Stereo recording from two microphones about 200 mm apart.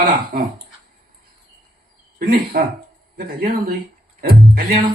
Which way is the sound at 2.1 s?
50° right (ahead or behind).